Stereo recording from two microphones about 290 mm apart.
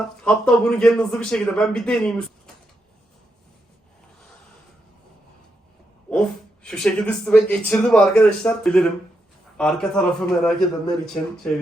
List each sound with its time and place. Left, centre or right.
0.3 s speech: centre
6.1 s speech: centre